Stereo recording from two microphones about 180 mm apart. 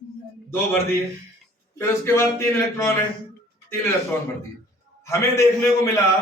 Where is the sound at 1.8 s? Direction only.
15° left (ahead or behind).